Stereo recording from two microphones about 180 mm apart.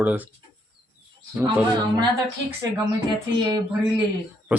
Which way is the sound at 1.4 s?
20° right (ahead or behind).